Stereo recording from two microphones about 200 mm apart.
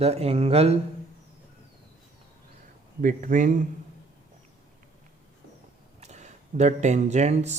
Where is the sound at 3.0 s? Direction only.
40° right (ahead or behind).